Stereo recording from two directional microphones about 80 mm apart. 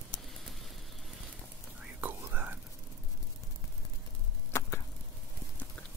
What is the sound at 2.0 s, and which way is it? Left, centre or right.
Whispering, right.